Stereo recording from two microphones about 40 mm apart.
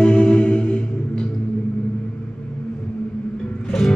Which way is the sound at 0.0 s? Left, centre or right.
Left.